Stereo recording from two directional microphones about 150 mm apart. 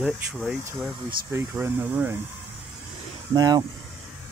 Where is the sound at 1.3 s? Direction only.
15° right (ahead or behind).